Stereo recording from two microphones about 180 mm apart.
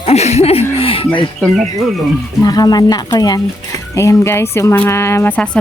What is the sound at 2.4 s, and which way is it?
A woman's voice, 20° left (ahead or behind).